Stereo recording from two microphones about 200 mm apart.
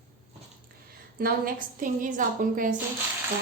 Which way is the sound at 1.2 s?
45° right (ahead or behind).